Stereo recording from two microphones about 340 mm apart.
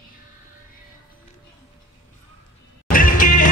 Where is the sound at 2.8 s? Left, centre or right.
Left.